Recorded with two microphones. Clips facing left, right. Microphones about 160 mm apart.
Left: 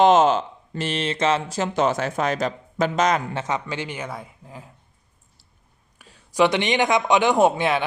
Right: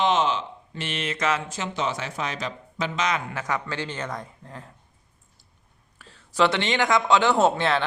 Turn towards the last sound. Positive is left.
turn(degrees=15)  # may be behind; listen again after turning